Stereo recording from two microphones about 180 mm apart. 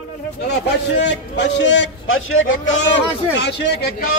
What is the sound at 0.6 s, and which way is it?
A man's voice, 75° left (ahead or behind).